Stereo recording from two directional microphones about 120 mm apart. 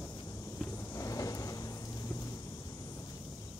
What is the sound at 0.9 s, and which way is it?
Vehicle, 30° left (ahead or behind).